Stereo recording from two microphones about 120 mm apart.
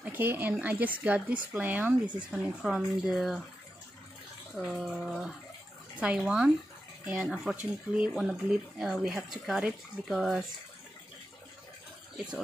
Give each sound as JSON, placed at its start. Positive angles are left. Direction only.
{"t": 0.0, "sound": "speech", "side_deg": -15}
{"t": 2.6, "sound": "speech", "side_deg": -5}
{"t": 4.6, "sound": "speech", "side_deg": -5}